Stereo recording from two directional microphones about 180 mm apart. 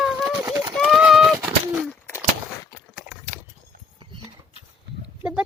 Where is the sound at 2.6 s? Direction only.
15° left (ahead or behind).